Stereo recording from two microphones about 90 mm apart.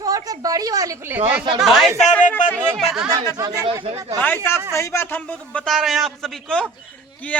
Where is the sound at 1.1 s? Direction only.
20° right (ahead or behind).